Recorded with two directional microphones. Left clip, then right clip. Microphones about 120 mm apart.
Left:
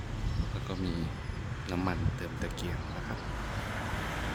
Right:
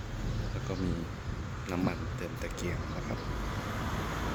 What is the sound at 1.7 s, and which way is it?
Speech, 25° left (ahead or behind).